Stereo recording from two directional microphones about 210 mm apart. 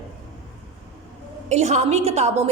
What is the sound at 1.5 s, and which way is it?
Speech, 35° right (ahead or behind).